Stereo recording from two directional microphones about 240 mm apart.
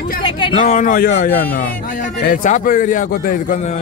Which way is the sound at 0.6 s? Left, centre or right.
Left.